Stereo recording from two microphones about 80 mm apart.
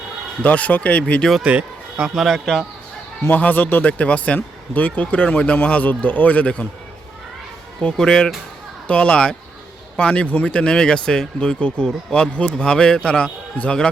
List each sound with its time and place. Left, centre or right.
0.4 s speech: centre
1.4 s speech: centre
2.1 s speech: centre
3.2 s speech: left
7.8 s speech: centre